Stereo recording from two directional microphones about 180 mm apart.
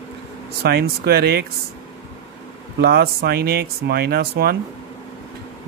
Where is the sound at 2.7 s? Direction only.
60° right (ahead or behind).